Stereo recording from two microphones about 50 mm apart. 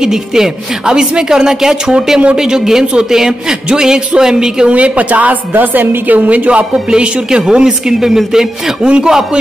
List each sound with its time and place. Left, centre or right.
0.0 s a woman's voice: centre
4.7 s a woman's voice: right